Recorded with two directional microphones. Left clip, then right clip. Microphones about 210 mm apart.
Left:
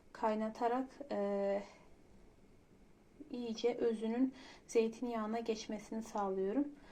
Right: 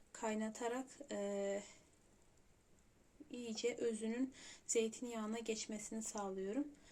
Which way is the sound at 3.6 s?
30° right (ahead or behind).